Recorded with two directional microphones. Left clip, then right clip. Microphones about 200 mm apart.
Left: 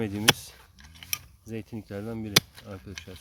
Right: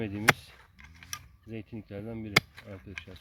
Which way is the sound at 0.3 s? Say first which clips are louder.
Left 5 dB; 15° left (ahead or behind).